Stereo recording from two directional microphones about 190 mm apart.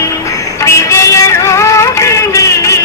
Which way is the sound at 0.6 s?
15° left (ahead or behind).